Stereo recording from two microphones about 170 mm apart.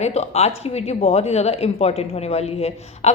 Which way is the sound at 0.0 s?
40° left (ahead or behind).